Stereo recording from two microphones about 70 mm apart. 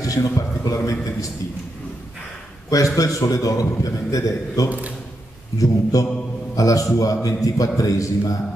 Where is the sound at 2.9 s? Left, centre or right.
Left.